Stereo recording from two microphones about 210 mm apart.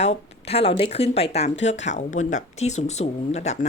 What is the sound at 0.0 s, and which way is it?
Speech, 30° left (ahead or behind).